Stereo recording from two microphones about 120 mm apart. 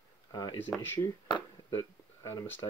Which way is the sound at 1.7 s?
20° left (ahead or behind).